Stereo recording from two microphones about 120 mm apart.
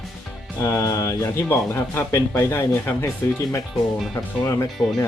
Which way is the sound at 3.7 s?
Centre (ahead or behind).